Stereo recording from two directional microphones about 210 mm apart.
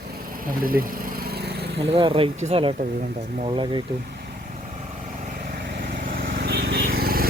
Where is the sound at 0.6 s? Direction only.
45° right (ahead or behind).